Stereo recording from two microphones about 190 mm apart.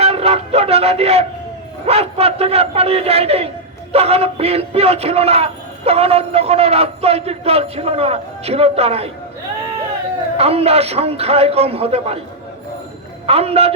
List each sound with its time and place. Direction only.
0.0 s a sound: 30° right (ahead or behind)
1.9 s speech: 30° right (ahead or behind)
10.3 s speech: 30° right (ahead or behind)
13.2 s speech: 30° right (ahead or behind)